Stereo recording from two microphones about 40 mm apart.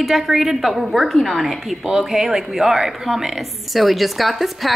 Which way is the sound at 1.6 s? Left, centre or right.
Centre.